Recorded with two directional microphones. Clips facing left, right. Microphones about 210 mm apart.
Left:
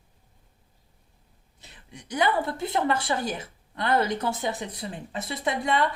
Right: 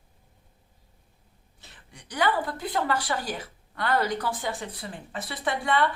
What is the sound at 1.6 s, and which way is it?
A woman's voice, 20° left (ahead or behind).